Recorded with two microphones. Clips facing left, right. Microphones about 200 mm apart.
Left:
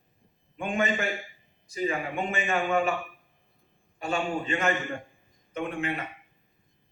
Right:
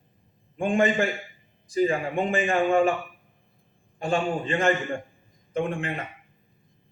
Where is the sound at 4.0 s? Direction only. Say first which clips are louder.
Right 4 dB; 30° right (ahead or behind).